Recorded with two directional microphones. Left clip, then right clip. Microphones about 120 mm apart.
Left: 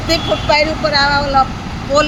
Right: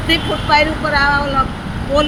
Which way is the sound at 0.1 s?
35° left (ahead or behind).